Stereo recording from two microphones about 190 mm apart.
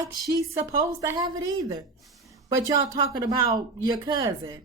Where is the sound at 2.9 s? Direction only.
20° right (ahead or behind).